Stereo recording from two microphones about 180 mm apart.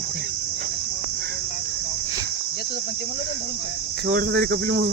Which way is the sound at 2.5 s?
60° left (ahead or behind).